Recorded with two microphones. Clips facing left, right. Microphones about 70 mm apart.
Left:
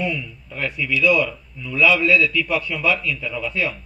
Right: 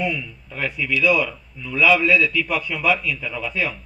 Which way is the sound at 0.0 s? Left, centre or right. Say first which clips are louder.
Even; centre.